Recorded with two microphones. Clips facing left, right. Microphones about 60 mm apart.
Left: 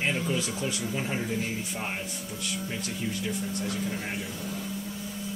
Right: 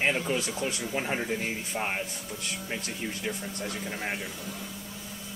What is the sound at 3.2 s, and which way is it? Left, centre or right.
Speech, right.